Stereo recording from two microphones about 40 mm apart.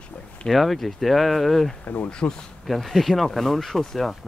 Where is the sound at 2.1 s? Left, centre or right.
Left.